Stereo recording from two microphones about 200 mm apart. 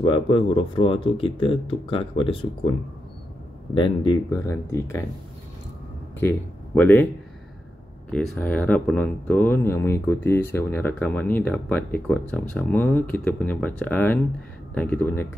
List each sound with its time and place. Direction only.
0.0 s speech: 25° left (ahead or behind)
3.7 s speech: 25° left (ahead or behind)
6.1 s speech: 10° left (ahead or behind)
8.1 s speech: 5° left (ahead or behind)